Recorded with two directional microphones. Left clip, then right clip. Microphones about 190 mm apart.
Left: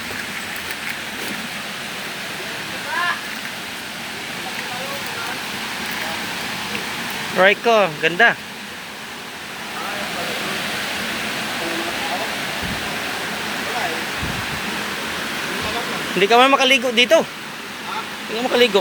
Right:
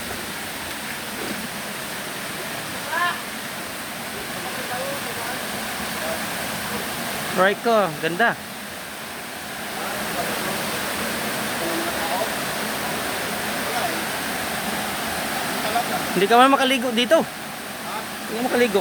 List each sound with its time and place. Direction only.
7.3 s speech: 5° right (ahead or behind)
16.2 s speech: 15° right (ahead or behind)
18.5 s speech: 5° right (ahead or behind)